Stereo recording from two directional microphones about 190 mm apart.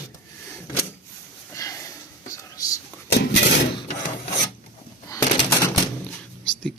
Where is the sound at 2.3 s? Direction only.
15° left (ahead or behind).